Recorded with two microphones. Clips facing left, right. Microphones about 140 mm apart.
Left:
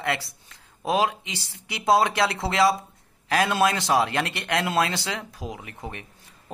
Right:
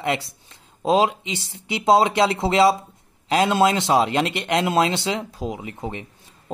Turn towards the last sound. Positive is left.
turn(degrees=-20)  # may be behind; listen again after turning